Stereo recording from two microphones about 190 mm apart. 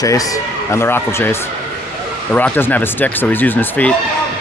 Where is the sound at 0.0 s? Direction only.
20° left (ahead or behind).